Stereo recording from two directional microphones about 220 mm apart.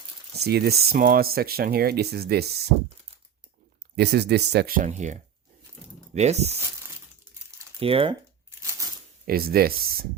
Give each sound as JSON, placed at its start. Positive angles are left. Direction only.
{"t": 0.3, "sound": "speech", "side_deg": -45}
{"t": 3.9, "sound": "speech", "side_deg": -50}
{"t": 7.8, "sound": "speech", "side_deg": -25}
{"t": 9.2, "sound": "speech", "side_deg": -45}